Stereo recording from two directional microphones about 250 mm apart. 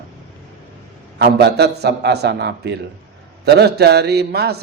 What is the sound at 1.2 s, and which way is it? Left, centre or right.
A man's voice, right.